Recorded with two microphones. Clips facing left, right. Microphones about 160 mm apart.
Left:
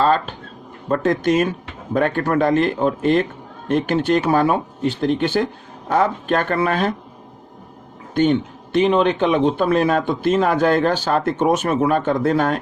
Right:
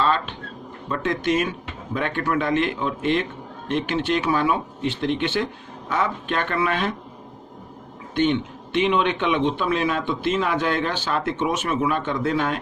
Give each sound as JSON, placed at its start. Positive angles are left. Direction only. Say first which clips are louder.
{"t": 0.0, "sound": "a man's voice", "louder": "left 5 dB", "side_deg": 45}
{"t": 8.1, "sound": "a man's voice", "louder": "left 4 dB", "side_deg": 45}